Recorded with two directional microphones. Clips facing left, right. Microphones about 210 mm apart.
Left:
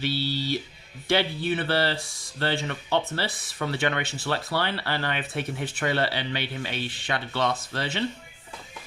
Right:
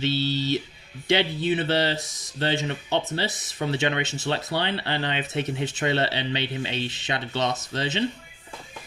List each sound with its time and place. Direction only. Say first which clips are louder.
0.0 s speech: right 3 dB; 25° right (ahead or behind)